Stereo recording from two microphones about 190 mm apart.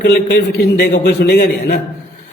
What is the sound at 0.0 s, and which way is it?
A man's voice, 55° left (ahead or behind).